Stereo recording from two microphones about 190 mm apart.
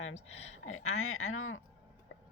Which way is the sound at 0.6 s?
90° left.